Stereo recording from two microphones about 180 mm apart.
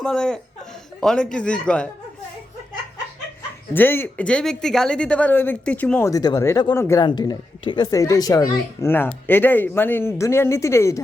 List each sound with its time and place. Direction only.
0.0 s speech: 5° left (ahead or behind)
3.8 s speech: 10° left (ahead or behind)